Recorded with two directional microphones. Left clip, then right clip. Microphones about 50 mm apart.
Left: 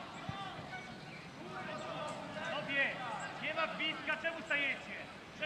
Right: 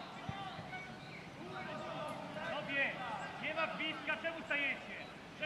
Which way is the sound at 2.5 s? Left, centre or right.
Centre.